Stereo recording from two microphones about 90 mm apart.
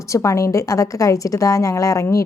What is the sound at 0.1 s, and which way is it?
A woman's voice, 35° left (ahead or behind).